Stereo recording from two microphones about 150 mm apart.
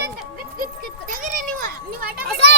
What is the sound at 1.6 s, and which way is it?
Children playing, 75° right (ahead or behind).